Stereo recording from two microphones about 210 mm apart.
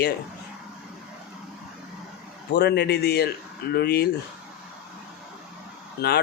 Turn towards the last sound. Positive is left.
turn(degrees=50)  # may be behind; listen again after turning